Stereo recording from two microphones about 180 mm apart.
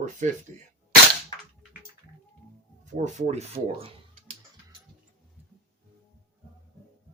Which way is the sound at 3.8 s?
35° right (ahead or behind).